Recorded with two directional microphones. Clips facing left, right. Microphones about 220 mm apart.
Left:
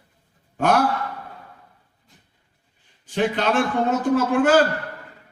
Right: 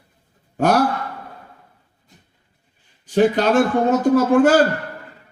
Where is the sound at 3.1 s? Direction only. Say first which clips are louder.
Right 6 dB; 45° right (ahead or behind).